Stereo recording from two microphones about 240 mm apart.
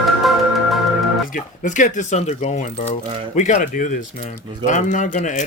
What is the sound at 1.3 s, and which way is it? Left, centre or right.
Speech, left.